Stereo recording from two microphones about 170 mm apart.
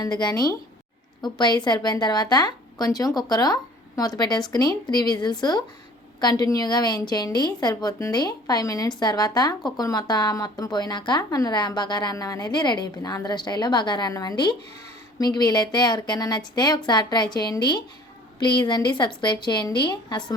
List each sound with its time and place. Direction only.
0.0 s speech: 25° left (ahead or behind)